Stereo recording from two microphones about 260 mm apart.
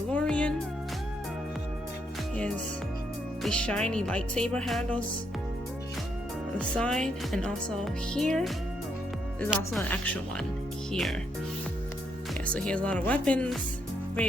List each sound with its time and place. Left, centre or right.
0.1 s music: centre
3.4 s speech: centre
6.6 s speech: centre
12.5 s speech: centre